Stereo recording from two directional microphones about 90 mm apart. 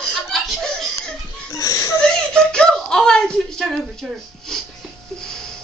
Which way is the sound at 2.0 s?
5° left (ahead or behind).